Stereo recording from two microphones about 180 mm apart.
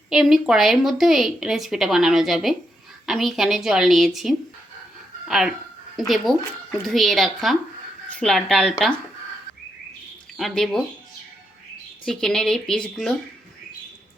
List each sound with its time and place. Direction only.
0.1 s a woman's voice: centre (ahead or behind)
10.3 s speech: centre (ahead or behind)
12.0 s a woman's voice: 5° left (ahead or behind)